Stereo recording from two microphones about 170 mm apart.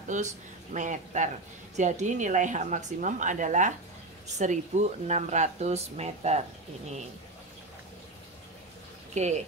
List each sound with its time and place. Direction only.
0.7 s a woman's voice: 45° right (ahead or behind)
9.1 s speech: 40° right (ahead or behind)